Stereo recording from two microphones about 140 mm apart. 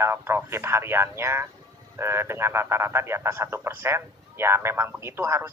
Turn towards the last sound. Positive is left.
turn(degrees=-20)  # may be behind; listen again after turning